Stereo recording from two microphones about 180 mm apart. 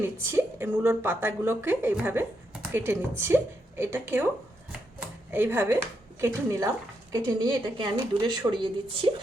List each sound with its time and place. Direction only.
0.0 s a woman's voice: 15° right (ahead or behind)